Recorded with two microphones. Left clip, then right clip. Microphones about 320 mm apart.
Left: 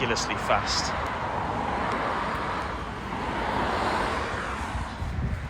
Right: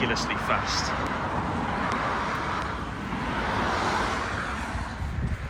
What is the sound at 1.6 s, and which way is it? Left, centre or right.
Vehicle, left.